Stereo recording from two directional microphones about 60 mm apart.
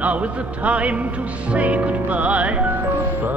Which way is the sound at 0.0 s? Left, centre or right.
Right.